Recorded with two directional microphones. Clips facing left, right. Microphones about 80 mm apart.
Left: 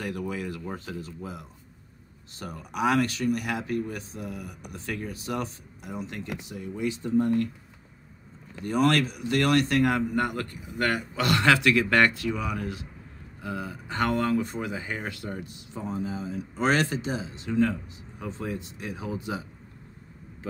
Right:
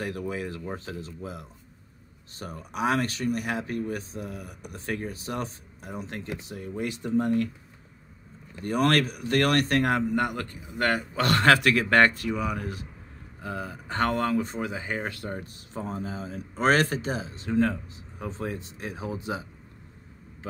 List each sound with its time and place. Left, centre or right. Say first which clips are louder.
0.3 s speech: even; right
2.3 s speech: left 1 dB; right
8.6 s speech: even; right
11.2 s speech: right 1 dB; right